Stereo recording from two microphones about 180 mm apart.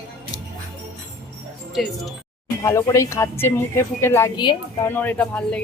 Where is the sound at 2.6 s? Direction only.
15° left (ahead or behind).